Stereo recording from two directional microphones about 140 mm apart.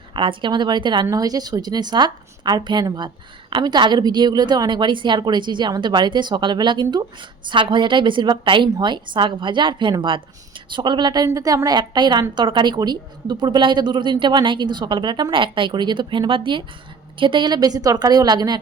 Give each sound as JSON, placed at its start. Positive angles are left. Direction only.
{"t": 0.1, "sound": "a woman's voice", "side_deg": -35}